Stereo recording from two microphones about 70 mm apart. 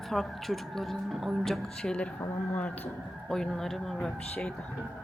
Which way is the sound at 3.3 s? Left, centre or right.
Centre.